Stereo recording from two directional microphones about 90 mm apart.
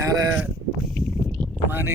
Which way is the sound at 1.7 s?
25° right (ahead or behind).